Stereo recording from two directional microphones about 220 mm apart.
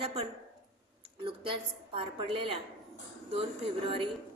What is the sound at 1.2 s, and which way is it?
A woman's voice, 25° right (ahead or behind).